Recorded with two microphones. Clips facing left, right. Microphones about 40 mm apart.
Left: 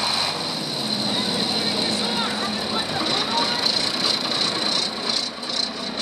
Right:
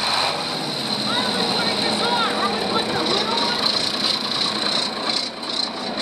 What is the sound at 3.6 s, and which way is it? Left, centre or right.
Wood, centre.